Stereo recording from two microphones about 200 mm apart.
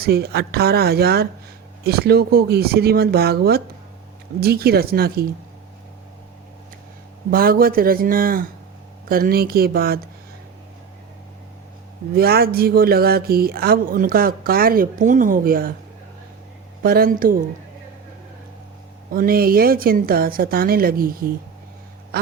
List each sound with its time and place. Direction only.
0.0 s speech: 50° right (ahead or behind)
7.3 s speech: 45° right (ahead or behind)
12.1 s speech: 50° right (ahead or behind)
16.8 s speech: 45° right (ahead or behind)
19.1 s speech: 45° right (ahead or behind)